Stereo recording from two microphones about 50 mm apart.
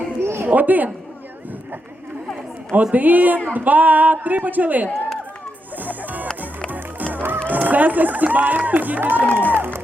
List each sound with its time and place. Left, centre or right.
0.2 s a sound: right
0.4 s speech: right
2.9 s speech: right
5.7 s music: right
7.4 s speech: right
9.6 s music: right